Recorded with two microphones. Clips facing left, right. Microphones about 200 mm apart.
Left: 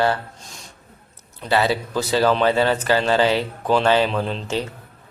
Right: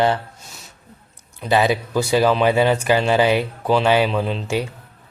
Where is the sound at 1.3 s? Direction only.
15° right (ahead or behind).